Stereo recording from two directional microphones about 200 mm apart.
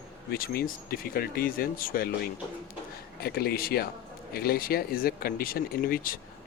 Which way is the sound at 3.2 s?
50° left (ahead or behind).